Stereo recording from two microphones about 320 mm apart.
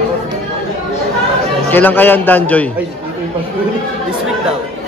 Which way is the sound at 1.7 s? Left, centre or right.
Centre.